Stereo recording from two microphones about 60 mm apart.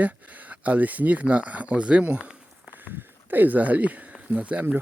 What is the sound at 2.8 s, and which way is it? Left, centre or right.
Speech, right.